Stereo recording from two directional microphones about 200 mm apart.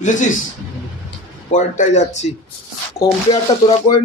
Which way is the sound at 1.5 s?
40° left (ahead or behind).